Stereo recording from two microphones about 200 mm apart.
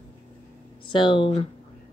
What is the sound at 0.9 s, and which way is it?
Speech, 25° left (ahead or behind).